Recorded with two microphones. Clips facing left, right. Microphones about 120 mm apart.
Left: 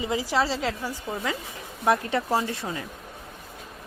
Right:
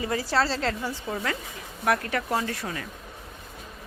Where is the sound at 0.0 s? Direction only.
15° left (ahead or behind).